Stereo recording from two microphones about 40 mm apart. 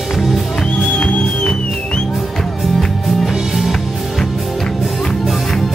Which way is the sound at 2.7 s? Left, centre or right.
Centre.